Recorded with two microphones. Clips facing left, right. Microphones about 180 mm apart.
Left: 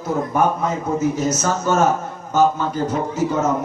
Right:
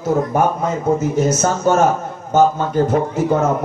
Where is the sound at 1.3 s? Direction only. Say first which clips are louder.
Right 3 dB; 55° right (ahead or behind).